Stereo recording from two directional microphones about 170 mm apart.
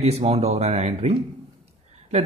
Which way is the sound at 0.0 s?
40° right (ahead or behind).